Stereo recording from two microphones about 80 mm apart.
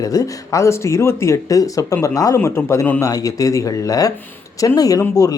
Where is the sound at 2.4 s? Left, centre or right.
Left.